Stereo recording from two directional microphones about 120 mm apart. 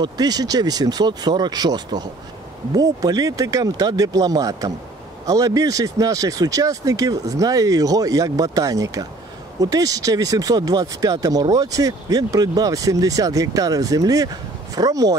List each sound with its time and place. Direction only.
0.0 s speech: 35° right (ahead or behind)